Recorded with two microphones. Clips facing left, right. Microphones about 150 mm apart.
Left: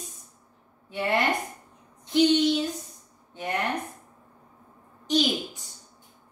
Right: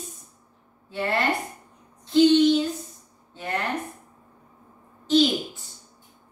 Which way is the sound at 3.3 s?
15° left (ahead or behind).